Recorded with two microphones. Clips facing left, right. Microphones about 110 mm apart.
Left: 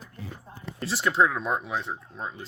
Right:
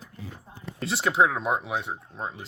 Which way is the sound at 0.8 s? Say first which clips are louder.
Right 1 dB; 20° right (ahead or behind).